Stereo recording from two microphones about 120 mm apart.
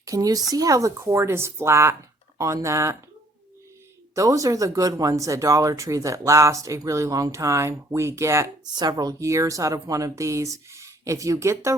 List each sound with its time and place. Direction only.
0.0 s speech: 30° right (ahead or behind)
4.1 s speech: 30° right (ahead or behind)
8.7 s speech: 35° right (ahead or behind)